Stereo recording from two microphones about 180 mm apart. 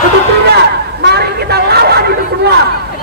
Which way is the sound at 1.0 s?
65° right (ahead or behind).